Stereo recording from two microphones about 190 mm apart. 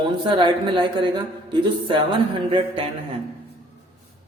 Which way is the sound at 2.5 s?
30° right (ahead or behind).